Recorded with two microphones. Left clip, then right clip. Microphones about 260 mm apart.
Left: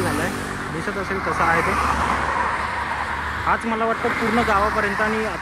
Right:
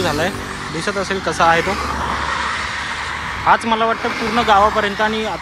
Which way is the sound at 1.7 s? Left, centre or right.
Left.